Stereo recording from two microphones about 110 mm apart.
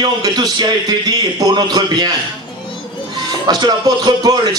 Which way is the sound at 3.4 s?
40° right (ahead or behind).